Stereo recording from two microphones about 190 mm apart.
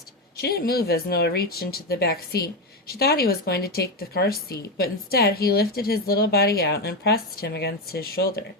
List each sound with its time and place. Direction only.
0.3 s speech: 55° left (ahead or behind)